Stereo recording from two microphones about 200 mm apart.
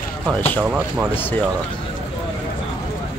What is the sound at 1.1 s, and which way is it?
Speech, 10° left (ahead or behind).